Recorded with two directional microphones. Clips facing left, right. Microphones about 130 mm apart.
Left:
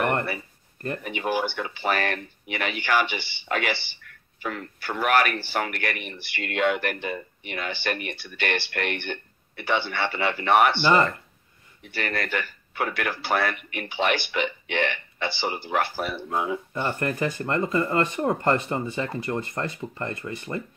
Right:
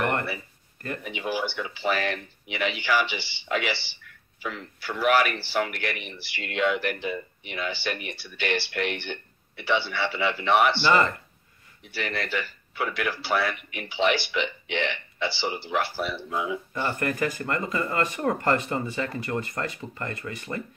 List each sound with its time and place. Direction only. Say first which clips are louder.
1.0 s speech: left 3 dB; 50° left (ahead or behind)
11.9 s speech: left 2 dB; 50° left (ahead or behind)
16.8 s speech: even; 30° left (ahead or behind)